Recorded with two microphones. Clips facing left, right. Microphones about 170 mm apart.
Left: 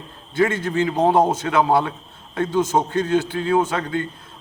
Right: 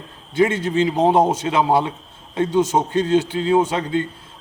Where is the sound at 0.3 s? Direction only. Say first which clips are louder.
Right 2 dB; 20° right (ahead or behind).